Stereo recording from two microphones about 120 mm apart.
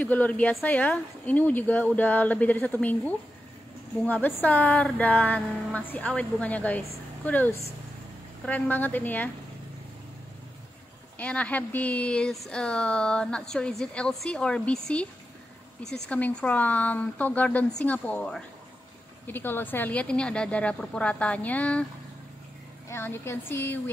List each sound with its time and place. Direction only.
0.0 s speech: 15° left (ahead or behind)
11.1 s speech: 10° left (ahead or behind)
22.8 s a woman's voice: 20° left (ahead or behind)